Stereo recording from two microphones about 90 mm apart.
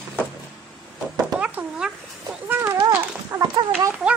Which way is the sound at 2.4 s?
25° right (ahead or behind).